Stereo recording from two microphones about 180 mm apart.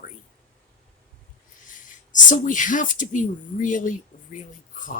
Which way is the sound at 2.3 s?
45° left (ahead or behind).